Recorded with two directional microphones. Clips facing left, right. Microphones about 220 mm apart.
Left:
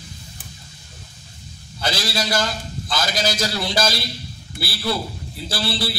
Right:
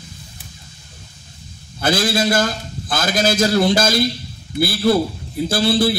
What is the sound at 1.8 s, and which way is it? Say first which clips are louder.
A man's voice: right 7 dB; 50° right (ahead or behind).